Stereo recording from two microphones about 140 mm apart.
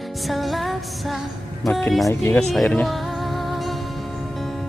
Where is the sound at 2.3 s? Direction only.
10° left (ahead or behind).